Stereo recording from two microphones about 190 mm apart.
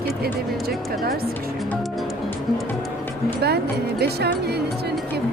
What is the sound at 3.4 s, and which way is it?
Music, 60° right (ahead or behind).